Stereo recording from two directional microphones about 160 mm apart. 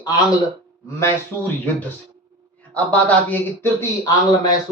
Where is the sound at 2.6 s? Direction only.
10° left (ahead or behind).